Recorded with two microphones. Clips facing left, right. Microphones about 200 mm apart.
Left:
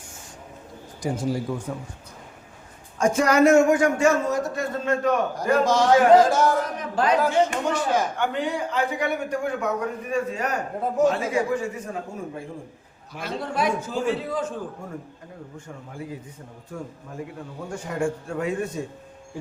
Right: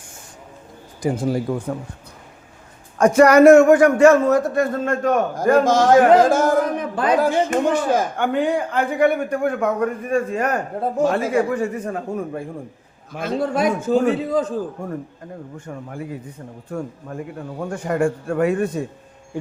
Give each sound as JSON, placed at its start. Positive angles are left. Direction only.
{"t": 1.0, "sound": "a man's voice", "side_deg": -55}
{"t": 3.0, "sound": "a man's voice", "side_deg": -65}
{"t": 13.1, "sound": "speech", "side_deg": -50}
{"t": 16.7, "sound": "a man's voice", "side_deg": -65}